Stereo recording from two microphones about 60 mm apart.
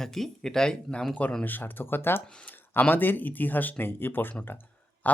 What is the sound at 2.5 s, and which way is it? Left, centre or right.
Speech, left.